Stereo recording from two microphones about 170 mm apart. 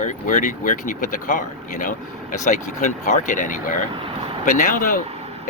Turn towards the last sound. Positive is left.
turn(degrees=50)  # may be behind; listen again after turning